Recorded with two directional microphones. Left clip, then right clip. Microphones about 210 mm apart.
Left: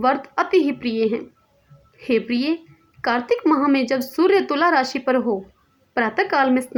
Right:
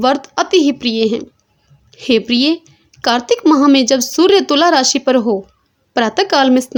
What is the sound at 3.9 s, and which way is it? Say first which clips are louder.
Speech: right 8 dB; 35° right (ahead or behind).